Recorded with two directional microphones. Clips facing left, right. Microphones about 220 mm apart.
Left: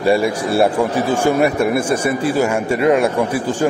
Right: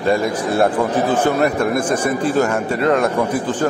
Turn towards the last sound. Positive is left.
turn(degrees=10)  # may be behind; listen again after turning